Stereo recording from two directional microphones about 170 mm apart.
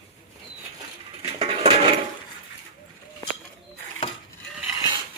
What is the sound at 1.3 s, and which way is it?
Coin, 30° right (ahead or behind).